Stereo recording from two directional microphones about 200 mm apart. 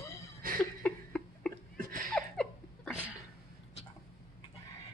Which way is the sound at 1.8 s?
45° right (ahead or behind).